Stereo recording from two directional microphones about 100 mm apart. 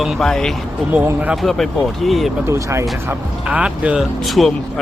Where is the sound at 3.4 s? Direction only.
10° right (ahead or behind).